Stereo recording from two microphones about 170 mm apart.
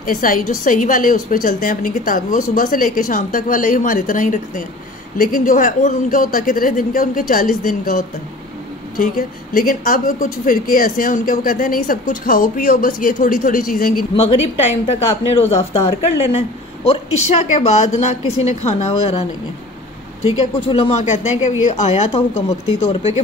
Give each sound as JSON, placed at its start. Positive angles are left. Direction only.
{"t": 0.0, "sound": "a woman's voice", "side_deg": 55}
{"t": 14.1, "sound": "a woman's voice", "side_deg": 40}